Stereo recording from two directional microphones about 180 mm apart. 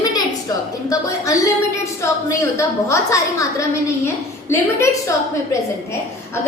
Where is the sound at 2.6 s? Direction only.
15° left (ahead or behind).